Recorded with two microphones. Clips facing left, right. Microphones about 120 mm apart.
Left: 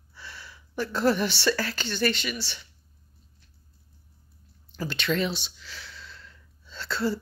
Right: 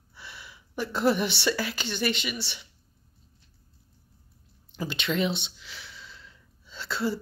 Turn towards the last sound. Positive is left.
turn(degrees=-15)  # may be behind; listen again after turning